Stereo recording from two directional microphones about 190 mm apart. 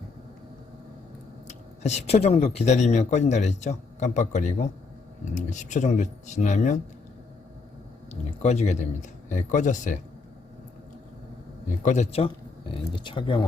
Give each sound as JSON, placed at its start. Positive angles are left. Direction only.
{"t": 1.5, "sound": "speech", "side_deg": 35}
{"t": 8.1, "sound": "speech", "side_deg": 35}
{"t": 11.9, "sound": "speech", "side_deg": 35}